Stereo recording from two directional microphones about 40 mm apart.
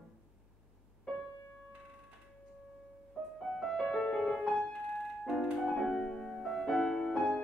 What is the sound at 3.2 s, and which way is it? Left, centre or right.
Music, centre.